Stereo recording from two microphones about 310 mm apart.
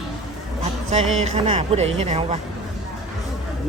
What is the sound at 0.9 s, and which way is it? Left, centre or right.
Speech, right.